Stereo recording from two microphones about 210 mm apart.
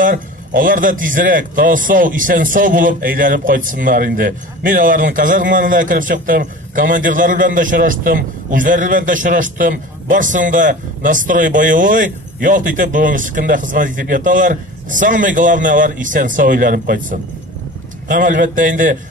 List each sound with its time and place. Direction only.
0.0 s a man's voice: 40° right (ahead or behind)